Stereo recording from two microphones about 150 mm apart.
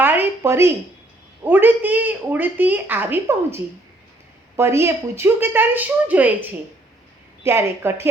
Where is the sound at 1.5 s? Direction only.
10° right (ahead or behind).